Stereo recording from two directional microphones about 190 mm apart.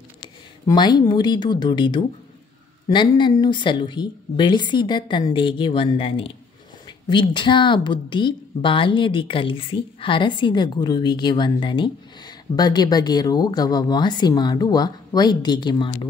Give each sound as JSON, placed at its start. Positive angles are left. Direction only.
{"t": 0.7, "sound": "speech", "side_deg": 20}